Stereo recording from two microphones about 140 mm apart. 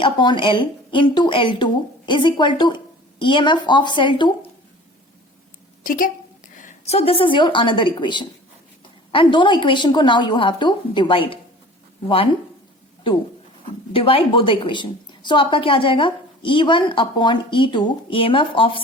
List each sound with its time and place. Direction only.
0.0 s a woman's voice: 35° left (ahead or behind)
5.8 s a woman's voice: 75° left (ahead or behind)
6.6 s a woman's voice: 60° left (ahead or behind); by 12.3 s 40° left (ahead or behind)
13.9 s a woman's voice: 40° left (ahead or behind)